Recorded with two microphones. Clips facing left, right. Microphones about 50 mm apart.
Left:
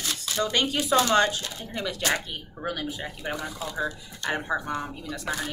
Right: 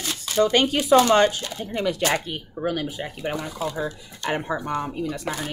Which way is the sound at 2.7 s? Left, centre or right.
Centre.